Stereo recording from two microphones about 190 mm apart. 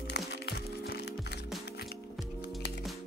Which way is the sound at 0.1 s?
60° left (ahead or behind).